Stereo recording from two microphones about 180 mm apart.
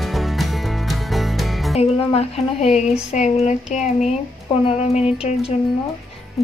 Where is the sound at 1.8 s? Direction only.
35° left (ahead or behind).